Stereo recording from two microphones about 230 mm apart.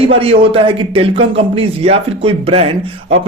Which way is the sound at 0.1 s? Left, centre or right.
Right.